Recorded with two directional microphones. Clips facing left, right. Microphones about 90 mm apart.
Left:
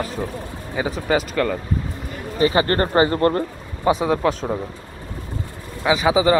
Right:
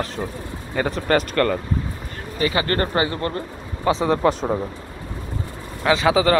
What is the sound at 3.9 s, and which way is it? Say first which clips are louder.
Speech: left 2 dB; 20° left (ahead or behind).